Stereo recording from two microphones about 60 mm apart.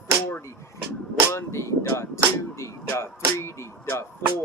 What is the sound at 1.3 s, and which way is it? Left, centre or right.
Speech, left.